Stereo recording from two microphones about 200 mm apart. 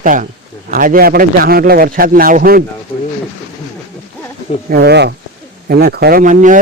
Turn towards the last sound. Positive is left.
turn(degrees=-40)  # may be behind; listen again after turning